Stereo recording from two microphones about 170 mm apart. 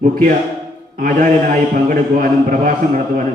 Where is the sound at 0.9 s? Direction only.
55° right (ahead or behind).